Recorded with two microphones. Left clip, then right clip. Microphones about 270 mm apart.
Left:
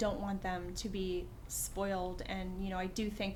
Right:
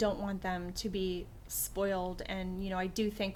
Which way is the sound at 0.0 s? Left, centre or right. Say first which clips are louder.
Right 3 dB; right.